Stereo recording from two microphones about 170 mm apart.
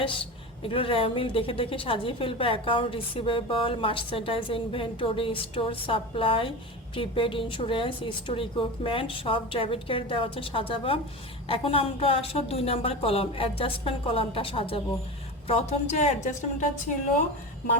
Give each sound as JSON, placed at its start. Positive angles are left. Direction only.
{"t": 0.0, "sound": "a woman's voice", "side_deg": 30}